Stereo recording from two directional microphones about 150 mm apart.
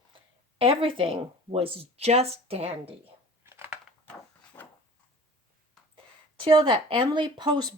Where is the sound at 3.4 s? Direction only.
15° right (ahead or behind).